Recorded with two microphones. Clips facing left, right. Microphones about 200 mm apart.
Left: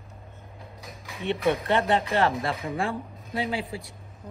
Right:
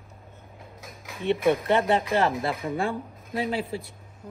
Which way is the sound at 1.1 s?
Centre (ahead or behind).